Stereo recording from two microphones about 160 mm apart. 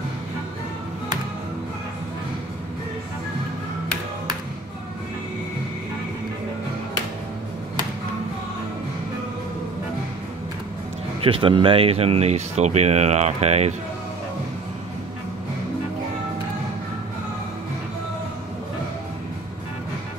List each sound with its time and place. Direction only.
11.2 s speech: 35° right (ahead or behind)